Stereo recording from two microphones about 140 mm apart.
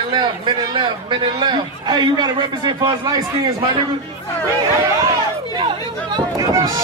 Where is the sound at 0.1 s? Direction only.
35° right (ahead or behind).